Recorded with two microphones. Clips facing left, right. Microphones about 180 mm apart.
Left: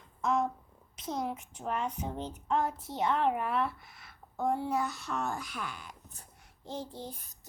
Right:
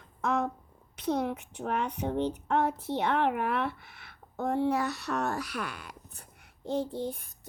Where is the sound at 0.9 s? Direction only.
65° right (ahead or behind).